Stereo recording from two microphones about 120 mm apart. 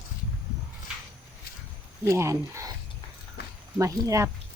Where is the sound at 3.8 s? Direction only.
25° right (ahead or behind).